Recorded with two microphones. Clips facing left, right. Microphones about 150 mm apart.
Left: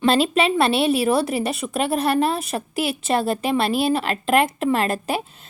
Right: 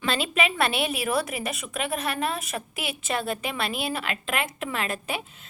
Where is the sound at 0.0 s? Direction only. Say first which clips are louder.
Left 8 dB; 35° left (ahead or behind).